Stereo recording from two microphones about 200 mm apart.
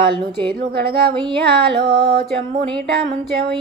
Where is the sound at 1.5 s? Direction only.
50° right (ahead or behind).